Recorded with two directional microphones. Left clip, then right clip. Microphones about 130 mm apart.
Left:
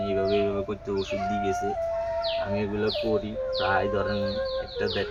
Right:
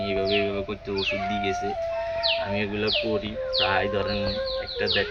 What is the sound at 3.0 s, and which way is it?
Speech, 5° left (ahead or behind).